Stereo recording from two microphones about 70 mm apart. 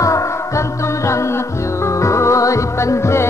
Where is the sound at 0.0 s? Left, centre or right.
Left.